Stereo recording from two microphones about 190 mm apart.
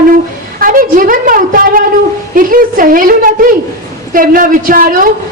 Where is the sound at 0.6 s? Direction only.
45° right (ahead or behind).